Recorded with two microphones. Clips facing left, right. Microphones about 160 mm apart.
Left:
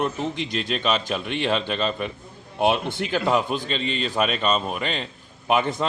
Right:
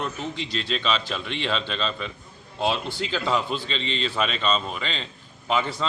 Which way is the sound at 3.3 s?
50° left (ahead or behind).